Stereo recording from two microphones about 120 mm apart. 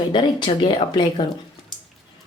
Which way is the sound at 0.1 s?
40° left (ahead or behind).